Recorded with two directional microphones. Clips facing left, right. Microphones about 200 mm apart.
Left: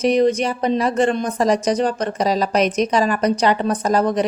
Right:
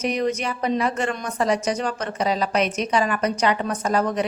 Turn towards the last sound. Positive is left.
turn(degrees=35)  # may be behind; listen again after turning